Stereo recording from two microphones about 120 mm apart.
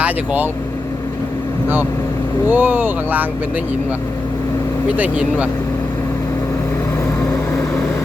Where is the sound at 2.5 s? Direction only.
15° right (ahead or behind).